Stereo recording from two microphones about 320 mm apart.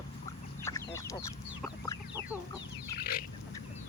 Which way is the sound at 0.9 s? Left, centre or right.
Centre.